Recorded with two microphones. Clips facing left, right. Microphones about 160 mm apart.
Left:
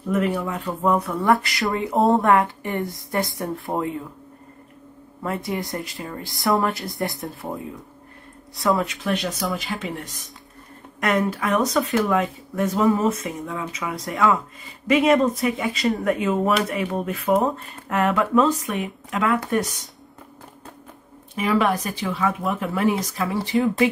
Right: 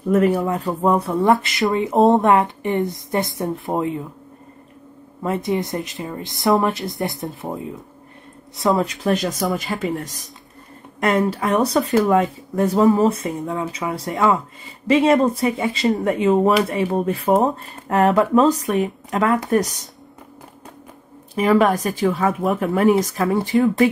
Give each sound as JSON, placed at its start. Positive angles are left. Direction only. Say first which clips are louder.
{"t": 0.1, "sound": "speech", "louder": "right 6 dB", "side_deg": -35}
{"t": 5.2, "sound": "speech", "louder": "right 5 dB", "side_deg": -20}
{"t": 9.0, "sound": "speech", "louder": "right 5 dB", "side_deg": -45}
{"t": 9.5, "sound": "speech", "louder": "right 4 dB", "side_deg": 0}
{"t": 9.8, "sound": "speech", "louder": "right 6 dB", "side_deg": -40}
{"t": 11.0, "sound": "speech", "louder": "right 3 dB", "side_deg": -30}
{"t": 21.4, "sound": "speech", "louder": "right 5 dB", "side_deg": -45}